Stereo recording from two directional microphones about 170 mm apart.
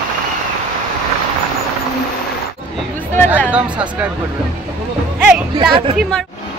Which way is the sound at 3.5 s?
5° right (ahead or behind).